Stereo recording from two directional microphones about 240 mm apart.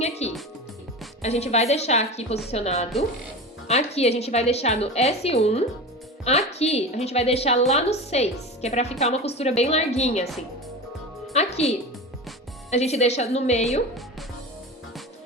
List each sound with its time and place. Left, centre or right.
0.0 s a woman's voice: left
11.3 s a woman's voice: left
12.7 s a woman's voice: left